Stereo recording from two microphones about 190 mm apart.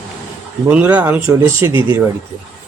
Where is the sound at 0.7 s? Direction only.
5° right (ahead or behind).